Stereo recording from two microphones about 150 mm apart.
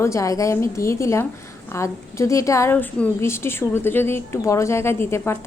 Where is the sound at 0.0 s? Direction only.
20° left (ahead or behind).